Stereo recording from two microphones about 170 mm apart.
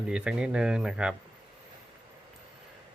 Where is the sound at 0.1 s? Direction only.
5° right (ahead or behind).